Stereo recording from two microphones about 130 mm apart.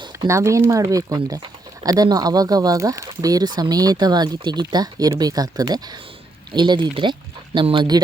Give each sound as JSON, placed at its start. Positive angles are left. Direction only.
{"t": 0.3, "sound": "speech", "side_deg": -20}